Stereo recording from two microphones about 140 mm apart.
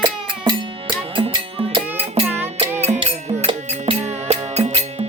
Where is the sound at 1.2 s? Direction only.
40° right (ahead or behind).